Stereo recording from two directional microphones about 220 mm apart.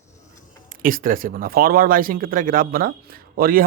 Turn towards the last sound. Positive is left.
turn(degrees=-40)  # may be behind; listen again after turning